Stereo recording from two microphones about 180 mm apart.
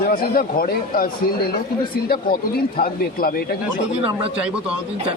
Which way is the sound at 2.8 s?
55° left (ahead or behind).